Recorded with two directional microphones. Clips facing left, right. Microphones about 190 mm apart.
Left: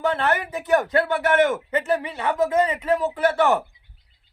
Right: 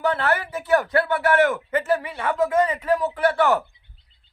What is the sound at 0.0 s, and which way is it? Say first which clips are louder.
A man's voice: even; 20° left (ahead or behind).